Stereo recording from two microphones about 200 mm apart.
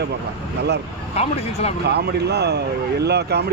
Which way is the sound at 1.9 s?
55° right (ahead or behind).